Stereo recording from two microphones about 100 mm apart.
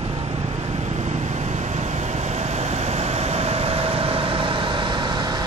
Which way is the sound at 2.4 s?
90° right.